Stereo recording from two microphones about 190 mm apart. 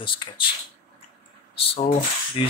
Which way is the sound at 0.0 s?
25° left (ahead or behind).